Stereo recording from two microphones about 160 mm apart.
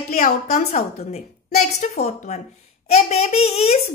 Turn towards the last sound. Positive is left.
turn(degrees=40)  # may be behind; listen again after turning